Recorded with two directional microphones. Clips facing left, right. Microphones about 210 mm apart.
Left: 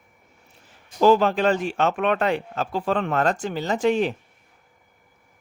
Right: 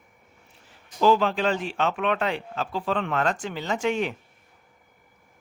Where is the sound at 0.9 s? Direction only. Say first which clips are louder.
Left 4 dB; 45° left (ahead or behind).